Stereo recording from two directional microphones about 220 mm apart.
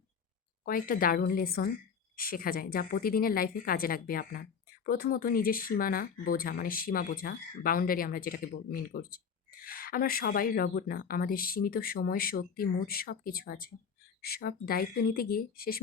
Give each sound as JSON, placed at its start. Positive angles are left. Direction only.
{"t": 0.6, "sound": "speech", "side_deg": 40}